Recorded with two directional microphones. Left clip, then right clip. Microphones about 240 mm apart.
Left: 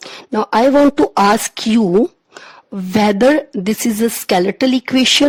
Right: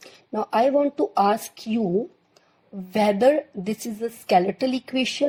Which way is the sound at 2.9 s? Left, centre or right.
Left.